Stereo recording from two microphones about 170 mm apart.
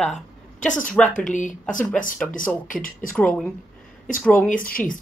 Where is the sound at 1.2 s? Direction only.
50° left (ahead or behind).